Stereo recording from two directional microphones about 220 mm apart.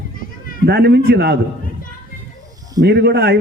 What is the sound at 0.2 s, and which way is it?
Children playing, 40° left (ahead or behind).